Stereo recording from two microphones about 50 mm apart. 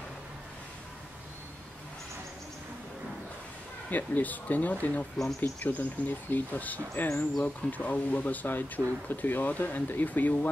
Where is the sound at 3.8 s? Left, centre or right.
Left.